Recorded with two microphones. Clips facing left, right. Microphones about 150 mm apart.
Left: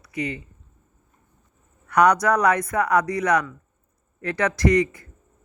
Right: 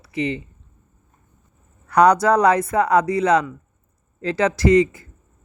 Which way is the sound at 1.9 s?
30° right (ahead or behind).